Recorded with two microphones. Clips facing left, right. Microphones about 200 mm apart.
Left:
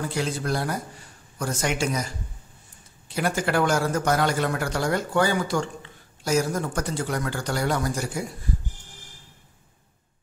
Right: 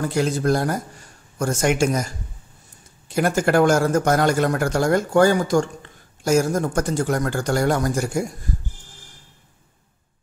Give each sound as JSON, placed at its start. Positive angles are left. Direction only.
{"t": 0.0, "sound": "speech", "side_deg": -45}
{"t": 3.2, "sound": "speech", "side_deg": -45}